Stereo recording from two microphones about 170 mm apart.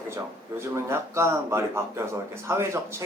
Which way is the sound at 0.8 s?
15° right (ahead or behind).